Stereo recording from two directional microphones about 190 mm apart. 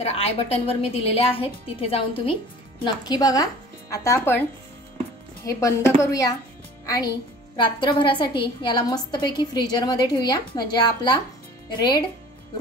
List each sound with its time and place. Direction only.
0.0 s a woman's voice: 30° left (ahead or behind); by 4.4 s 15° left (ahead or behind)
5.4 s a woman's voice: 15° left (ahead or behind)